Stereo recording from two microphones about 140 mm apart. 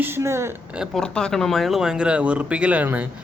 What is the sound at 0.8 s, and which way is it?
Speech, 5° left (ahead or behind).